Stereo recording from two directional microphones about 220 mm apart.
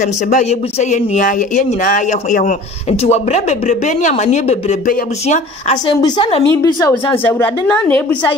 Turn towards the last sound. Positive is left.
turn(degrees=10)  # may be behind; listen again after turning